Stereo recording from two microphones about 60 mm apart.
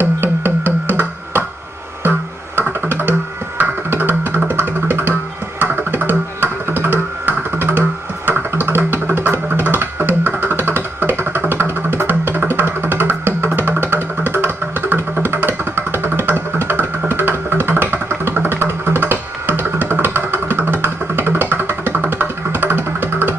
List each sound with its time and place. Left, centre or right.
0.0 s music: right
2.9 s music: right